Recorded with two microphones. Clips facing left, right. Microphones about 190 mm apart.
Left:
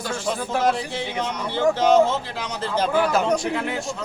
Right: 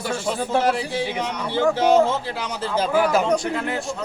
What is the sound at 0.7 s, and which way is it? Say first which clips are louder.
A man's voice: right 2 dB; 10° right (ahead or behind).